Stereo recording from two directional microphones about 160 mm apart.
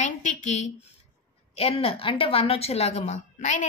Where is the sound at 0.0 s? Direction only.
45° left (ahead or behind).